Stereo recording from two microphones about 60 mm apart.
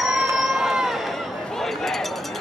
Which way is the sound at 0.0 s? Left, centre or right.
Centre.